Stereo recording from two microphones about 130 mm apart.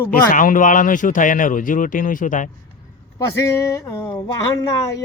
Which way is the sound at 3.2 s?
25° left (ahead or behind).